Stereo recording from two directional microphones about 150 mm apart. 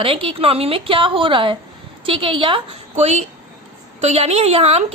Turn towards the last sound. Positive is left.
turn(degrees=-45)  # may be behind; listen again after turning